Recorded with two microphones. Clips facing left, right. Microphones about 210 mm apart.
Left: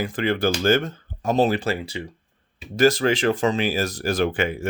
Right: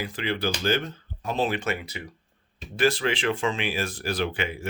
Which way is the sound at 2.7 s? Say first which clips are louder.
Left 6 dB; 40° left (ahead or behind).